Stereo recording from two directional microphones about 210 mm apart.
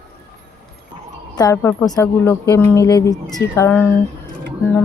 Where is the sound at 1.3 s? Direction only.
15° left (ahead or behind).